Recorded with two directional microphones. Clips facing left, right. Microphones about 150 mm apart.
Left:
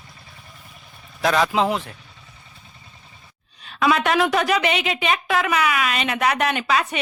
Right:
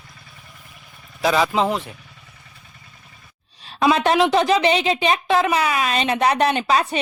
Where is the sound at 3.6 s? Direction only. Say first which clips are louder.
Right 2 dB; 30° right (ahead or behind).